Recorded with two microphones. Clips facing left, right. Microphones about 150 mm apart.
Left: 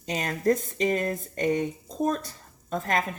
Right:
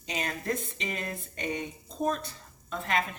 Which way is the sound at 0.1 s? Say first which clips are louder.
Left 8 dB; 45° left (ahead or behind).